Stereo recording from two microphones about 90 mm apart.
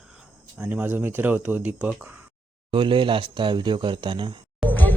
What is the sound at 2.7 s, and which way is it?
Speech, 70° right (ahead or behind).